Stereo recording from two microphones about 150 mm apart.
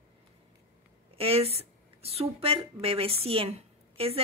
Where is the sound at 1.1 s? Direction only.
40° right (ahead or behind).